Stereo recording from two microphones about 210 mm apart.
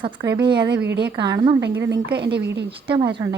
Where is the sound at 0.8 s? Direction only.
50° right (ahead or behind).